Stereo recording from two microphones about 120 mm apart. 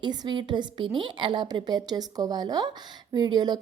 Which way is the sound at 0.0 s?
40° right (ahead or behind).